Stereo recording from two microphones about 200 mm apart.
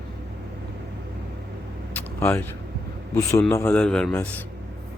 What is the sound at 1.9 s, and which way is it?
Vehicle, 10° left (ahead or behind).